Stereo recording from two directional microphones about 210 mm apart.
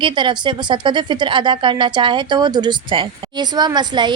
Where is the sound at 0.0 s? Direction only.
20° right (ahead or behind).